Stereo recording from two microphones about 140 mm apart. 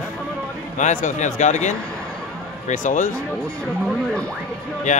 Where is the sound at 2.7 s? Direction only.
65° left (ahead or behind).